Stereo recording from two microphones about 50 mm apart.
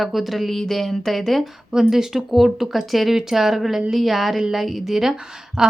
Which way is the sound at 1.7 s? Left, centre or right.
Centre.